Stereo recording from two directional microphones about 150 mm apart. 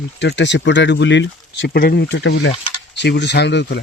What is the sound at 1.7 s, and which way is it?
Speech, 85° left.